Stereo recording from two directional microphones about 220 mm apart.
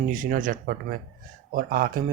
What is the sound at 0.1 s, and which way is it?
Speech, 35° right (ahead or behind).